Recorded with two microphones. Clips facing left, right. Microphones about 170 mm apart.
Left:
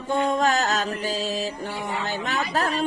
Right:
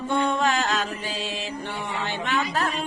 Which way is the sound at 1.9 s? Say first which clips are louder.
Right 2 dB; 40° left (ahead or behind).